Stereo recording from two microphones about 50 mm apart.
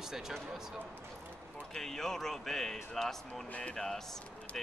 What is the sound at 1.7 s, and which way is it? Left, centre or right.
A man's voice, centre.